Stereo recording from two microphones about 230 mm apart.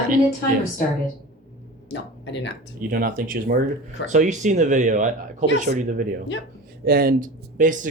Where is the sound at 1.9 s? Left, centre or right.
Left.